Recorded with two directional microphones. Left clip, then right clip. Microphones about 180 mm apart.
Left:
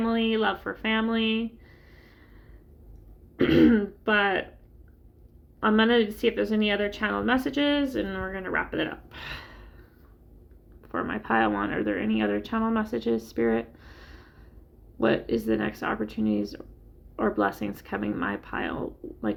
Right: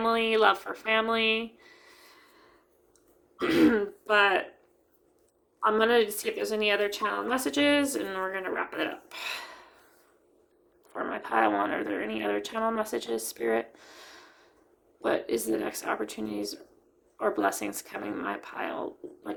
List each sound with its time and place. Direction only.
0.0 s speech: 20° right (ahead or behind)
3.3 s a woman's voice: 20° right (ahead or behind)
5.5 s a woman's voice: 15° right (ahead or behind)
11.2 s a woman's voice: 20° right (ahead or behind)